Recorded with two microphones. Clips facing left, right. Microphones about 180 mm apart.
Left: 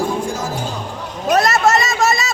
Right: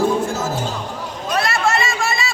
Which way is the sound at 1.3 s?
40° left (ahead or behind).